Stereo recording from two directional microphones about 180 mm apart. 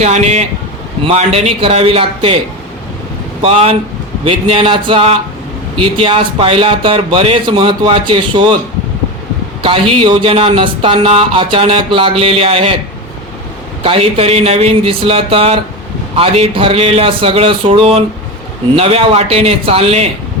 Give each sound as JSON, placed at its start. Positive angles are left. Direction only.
{"t": 0.0, "sound": "speech", "side_deg": -40}
{"t": 3.4, "sound": "speech", "side_deg": -30}
{"t": 9.6, "sound": "speech", "side_deg": -30}
{"t": 13.8, "sound": "speech", "side_deg": -30}